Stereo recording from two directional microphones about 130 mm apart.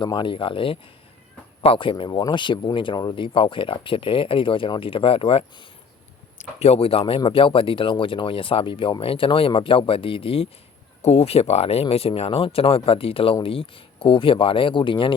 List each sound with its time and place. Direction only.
0.0 s speech: 35° left (ahead or behind)